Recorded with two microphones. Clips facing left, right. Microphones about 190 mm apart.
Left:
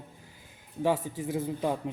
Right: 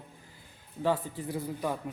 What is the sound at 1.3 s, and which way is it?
Speech, 20° left (ahead or behind).